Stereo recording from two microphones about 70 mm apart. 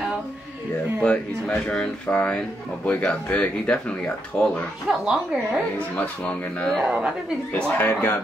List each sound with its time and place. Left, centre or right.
1.0 s speech: centre
4.8 s speech: centre
6.8 s speech: centre
7.5 s speech: left